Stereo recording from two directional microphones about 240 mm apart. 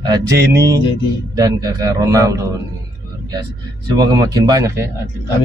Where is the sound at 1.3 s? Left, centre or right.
Centre.